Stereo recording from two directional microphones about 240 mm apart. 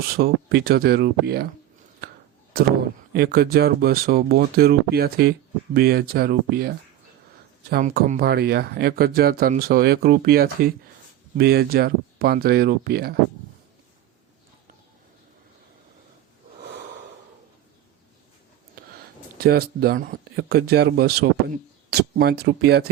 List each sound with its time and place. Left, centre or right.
0.1 s speech: right
3.1 s speech: right
16.6 s snort: right
19.4 s speech: right